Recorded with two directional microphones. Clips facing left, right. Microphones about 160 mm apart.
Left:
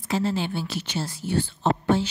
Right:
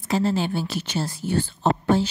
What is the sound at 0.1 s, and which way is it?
Speech, 40° right (ahead or behind).